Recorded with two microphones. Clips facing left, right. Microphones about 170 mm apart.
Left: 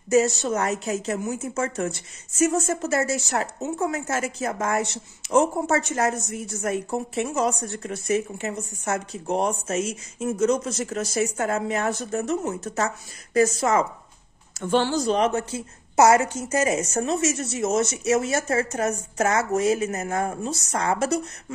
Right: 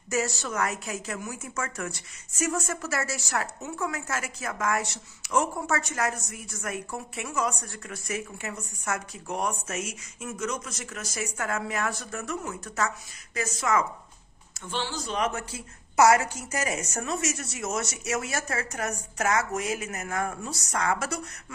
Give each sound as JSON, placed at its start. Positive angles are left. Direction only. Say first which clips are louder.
{"t": 0.1, "sound": "a woman's voice", "louder": "left 9 dB", "side_deg": 20}
{"t": 14.6, "sound": "a woman's voice", "louder": "left 11 dB", "side_deg": 50}